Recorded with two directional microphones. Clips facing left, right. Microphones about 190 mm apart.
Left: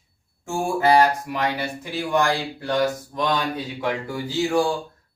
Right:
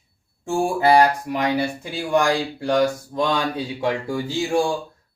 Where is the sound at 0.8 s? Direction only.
15° right (ahead or behind).